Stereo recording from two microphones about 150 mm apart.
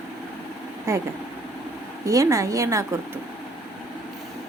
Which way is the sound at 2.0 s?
20° right (ahead or behind).